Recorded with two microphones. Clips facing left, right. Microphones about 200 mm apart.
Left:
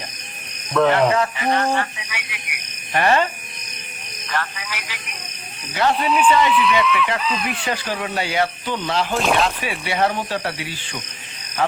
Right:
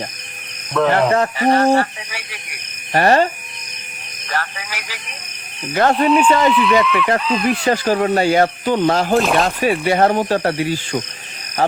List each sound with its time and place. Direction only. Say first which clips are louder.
0.7 s speech: even; centre (ahead or behind)
1.1 s speech: right 5 dB; 40° right (ahead or behind)
4.3 s speech: right 2 dB; 40° right (ahead or behind)
6.1 s speech: right 3 dB; centre (ahead or behind)
7.6 s speech: right 9 dB; 45° right (ahead or behind)